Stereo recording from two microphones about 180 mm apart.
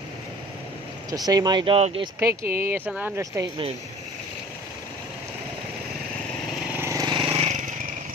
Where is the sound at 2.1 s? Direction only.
15° right (ahead or behind).